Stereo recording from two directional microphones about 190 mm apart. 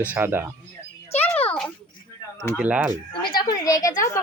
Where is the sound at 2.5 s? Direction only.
5° right (ahead or behind).